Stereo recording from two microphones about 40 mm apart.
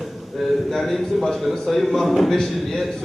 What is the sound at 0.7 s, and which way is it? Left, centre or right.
A man's voice, centre.